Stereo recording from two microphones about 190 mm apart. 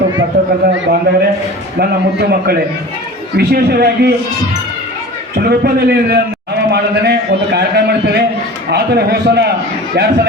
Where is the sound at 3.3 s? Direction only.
55° right (ahead or behind).